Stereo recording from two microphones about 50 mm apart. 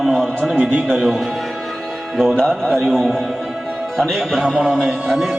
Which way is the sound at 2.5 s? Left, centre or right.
Centre.